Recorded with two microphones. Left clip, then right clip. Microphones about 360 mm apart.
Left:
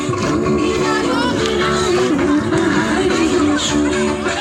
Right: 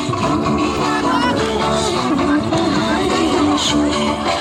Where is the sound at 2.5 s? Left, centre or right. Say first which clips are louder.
Left 1 dB; centre.